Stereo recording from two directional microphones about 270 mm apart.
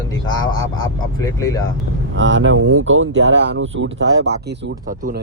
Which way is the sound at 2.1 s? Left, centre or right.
Right.